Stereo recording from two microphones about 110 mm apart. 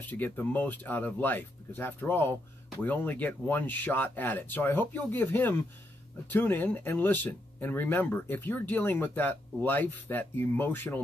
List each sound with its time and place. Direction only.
0.0 s speech: 15° left (ahead or behind)